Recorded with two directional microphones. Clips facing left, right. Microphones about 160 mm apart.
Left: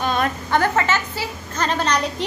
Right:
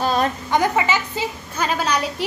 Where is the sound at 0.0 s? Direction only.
35° right (ahead or behind).